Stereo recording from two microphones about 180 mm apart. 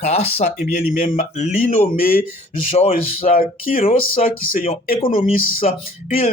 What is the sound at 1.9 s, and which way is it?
Speech, 55° left (ahead or behind).